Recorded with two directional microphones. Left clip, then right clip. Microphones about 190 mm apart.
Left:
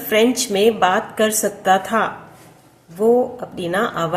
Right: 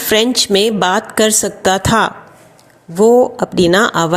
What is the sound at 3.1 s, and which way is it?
Speech, 50° right (ahead or behind).